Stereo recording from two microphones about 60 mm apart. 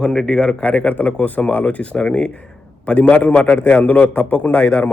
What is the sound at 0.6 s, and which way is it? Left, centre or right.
A man's voice, left.